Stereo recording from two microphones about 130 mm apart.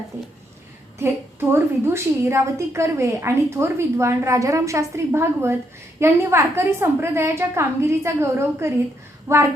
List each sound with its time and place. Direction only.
0.9 s a woman's voice: 15° right (ahead or behind)